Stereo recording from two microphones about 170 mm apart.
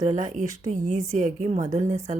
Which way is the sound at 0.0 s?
45° right (ahead or behind).